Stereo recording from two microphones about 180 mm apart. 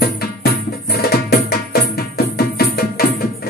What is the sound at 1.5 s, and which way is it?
Music, 60° left (ahead or behind).